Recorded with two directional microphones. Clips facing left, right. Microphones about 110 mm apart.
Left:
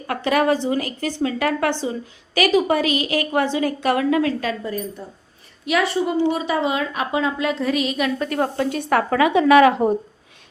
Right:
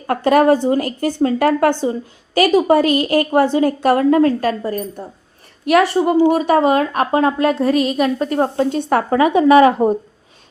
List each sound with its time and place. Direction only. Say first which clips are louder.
0.1 s a woman's voice: right 6 dB; 40° right (ahead or behind)
1.7 s a woman's voice: right 5 dB; 50° right (ahead or behind)
2.4 s a woman's voice: right 5 dB; 40° right (ahead or behind)